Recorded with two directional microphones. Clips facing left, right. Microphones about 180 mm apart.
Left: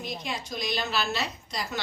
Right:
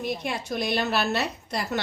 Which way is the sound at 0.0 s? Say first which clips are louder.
Right 5 dB; 60° right (ahead or behind).